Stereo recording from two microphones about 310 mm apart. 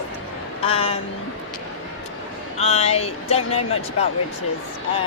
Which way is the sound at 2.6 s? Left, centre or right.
Centre.